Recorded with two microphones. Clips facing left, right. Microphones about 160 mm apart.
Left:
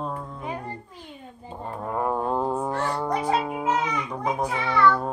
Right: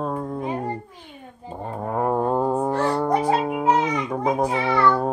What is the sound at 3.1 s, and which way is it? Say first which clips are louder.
Music: right 4 dB; 40° right (ahead or behind).